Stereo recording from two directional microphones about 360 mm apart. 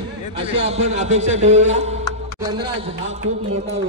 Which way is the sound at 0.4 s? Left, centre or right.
Centre.